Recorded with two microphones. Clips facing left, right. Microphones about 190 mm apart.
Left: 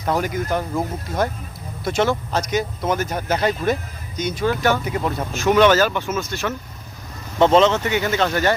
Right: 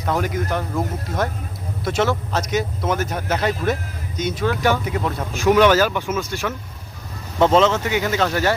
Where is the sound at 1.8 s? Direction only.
Centre (ahead or behind).